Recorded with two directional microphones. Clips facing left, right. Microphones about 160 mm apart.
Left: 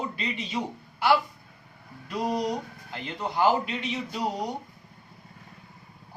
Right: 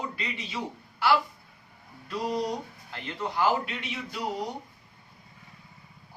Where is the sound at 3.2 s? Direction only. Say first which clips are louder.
Left 2 dB; 20° left (ahead or behind).